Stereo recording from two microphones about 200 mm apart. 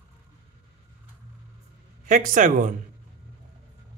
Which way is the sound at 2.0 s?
40° right (ahead or behind).